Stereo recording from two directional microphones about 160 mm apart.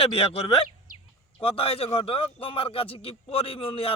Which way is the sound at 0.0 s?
35° left (ahead or behind).